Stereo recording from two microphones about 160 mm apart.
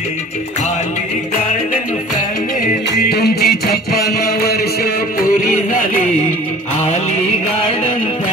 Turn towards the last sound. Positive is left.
turn(degrees=45)  # may be behind; listen again after turning